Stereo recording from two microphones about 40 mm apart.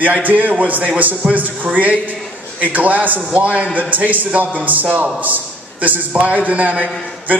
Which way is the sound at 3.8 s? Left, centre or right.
Right.